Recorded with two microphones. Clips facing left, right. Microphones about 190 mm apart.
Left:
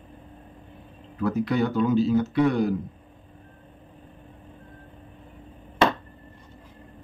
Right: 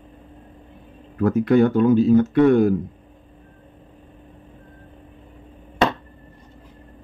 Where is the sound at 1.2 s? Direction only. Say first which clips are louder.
Right 8 dB; 50° right (ahead or behind).